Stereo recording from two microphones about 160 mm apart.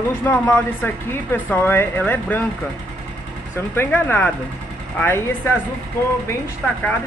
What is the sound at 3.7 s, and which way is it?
Speech, 10° left (ahead or behind).